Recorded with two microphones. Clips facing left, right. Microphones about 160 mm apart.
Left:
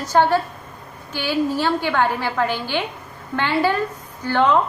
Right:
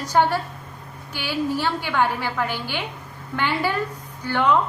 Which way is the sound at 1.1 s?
15° right (ahead or behind).